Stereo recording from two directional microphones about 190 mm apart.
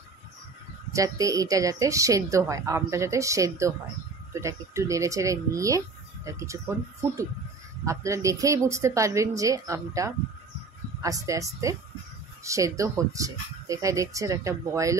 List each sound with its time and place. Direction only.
0.9 s a woman's voice: 15° right (ahead or behind)
7.8 s a woman's voice: 15° right (ahead or behind)